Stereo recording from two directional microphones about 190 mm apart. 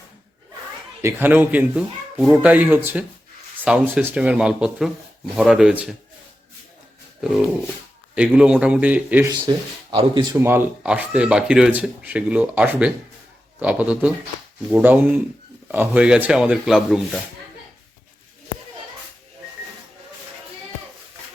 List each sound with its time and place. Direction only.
1.0 s speech: 10° right (ahead or behind)
7.2 s a sound: centre (ahead or behind)
8.1 s speech: 5° right (ahead or behind)
9.3 s speech: 25° right (ahead or behind)
10.3 s speech: 10° right (ahead or behind)